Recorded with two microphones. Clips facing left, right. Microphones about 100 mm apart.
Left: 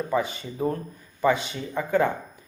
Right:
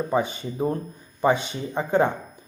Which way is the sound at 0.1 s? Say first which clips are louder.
Right 2 dB; 25° right (ahead or behind).